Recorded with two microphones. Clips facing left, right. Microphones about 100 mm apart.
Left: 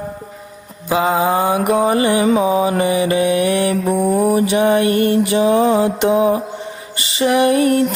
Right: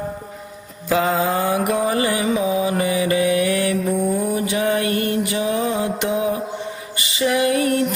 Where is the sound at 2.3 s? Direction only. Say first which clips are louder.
Left 5 dB; 40° left (ahead or behind); by 3.7 s 25° left (ahead or behind).